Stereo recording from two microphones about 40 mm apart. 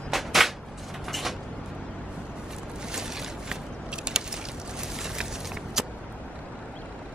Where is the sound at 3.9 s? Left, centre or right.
Right.